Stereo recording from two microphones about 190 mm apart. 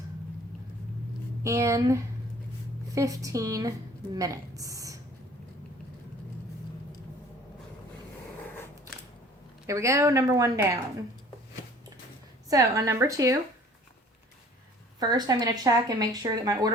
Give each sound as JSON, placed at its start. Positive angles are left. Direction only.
{"t": 1.5, "sound": "a woman's voice", "side_deg": -15}
{"t": 9.6, "sound": "a woman's voice", "side_deg": -15}
{"t": 12.5, "sound": "a woman's voice", "side_deg": -15}
{"t": 14.9, "sound": "speech", "side_deg": -20}